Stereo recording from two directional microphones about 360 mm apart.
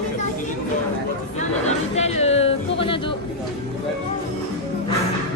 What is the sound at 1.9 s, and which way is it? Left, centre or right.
Music, centre.